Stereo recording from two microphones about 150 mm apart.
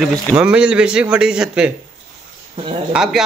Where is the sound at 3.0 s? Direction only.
5° right (ahead or behind).